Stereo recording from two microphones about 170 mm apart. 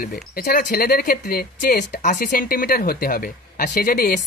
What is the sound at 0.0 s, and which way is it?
Speech, 65° left (ahead or behind).